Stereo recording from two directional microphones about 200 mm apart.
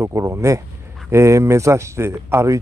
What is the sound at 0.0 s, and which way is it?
Speech, 15° right (ahead or behind).